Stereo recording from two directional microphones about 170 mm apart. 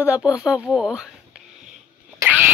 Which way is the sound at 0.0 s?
10° right (ahead or behind).